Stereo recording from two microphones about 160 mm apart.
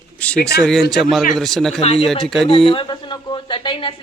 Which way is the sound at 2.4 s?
35° left (ahead or behind).